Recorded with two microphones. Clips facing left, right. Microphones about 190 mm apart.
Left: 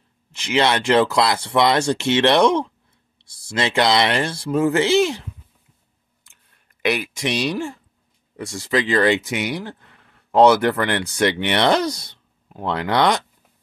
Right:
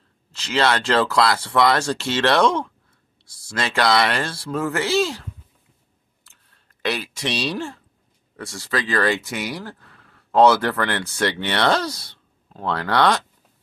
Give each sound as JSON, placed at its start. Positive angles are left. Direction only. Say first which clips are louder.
{"t": 0.3, "sound": "speech", "louder": "left 1 dB", "side_deg": 15}
{"t": 6.2, "sound": "a sound", "louder": "right 1 dB", "side_deg": 15}
{"t": 8.4, "sound": "speech", "louder": "left 5 dB", "side_deg": 15}